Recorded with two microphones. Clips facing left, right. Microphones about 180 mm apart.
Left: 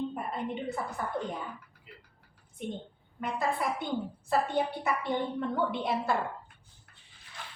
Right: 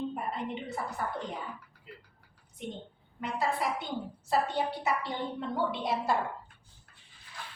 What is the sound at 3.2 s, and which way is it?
A woman's voice, 50° left (ahead or behind).